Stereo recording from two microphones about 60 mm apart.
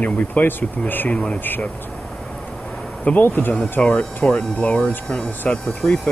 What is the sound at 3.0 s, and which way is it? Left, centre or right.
Speech, left.